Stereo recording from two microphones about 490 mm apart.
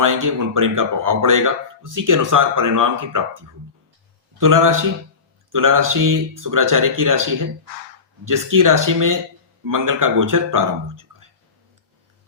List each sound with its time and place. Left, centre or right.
0.0 s speech: right
4.4 s speech: right